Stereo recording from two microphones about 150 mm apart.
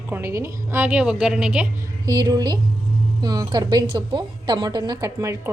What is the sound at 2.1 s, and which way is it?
A woman's voice, 25° right (ahead or behind).